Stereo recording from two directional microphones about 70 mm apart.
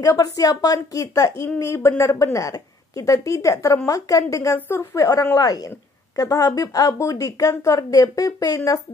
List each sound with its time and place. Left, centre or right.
0.0 s a woman's voice: left
4.6 s a woman's voice: left
4.9 s a woman's voice: left